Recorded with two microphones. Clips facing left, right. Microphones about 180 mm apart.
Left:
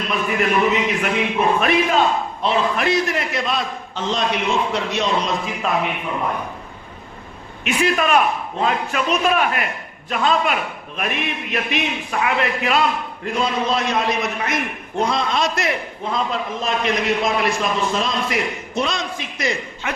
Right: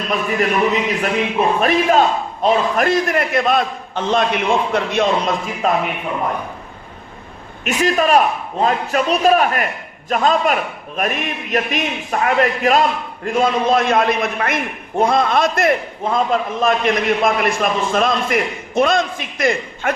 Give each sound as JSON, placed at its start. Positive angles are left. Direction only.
{"t": 0.3, "sound": "a man's voice", "side_deg": -35}
{"t": 7.6, "sound": "a man's voice", "side_deg": -40}